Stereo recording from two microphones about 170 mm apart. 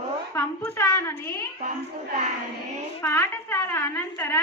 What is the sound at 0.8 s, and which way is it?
Speech, 15° left (ahead or behind).